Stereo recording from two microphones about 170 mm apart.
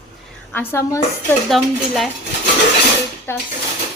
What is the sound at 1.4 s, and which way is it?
Speech, centre (ahead or behind).